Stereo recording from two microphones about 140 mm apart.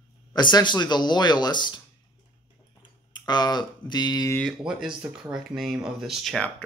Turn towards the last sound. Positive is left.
turn(degrees=0)  # may be behind; listen again after turning